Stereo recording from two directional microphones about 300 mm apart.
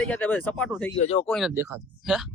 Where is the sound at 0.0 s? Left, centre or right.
Centre.